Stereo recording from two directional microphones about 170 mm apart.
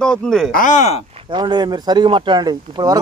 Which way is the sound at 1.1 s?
30° right (ahead or behind).